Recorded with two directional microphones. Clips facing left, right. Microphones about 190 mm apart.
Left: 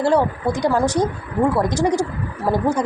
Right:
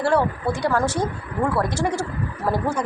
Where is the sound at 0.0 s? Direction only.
15° left (ahead or behind).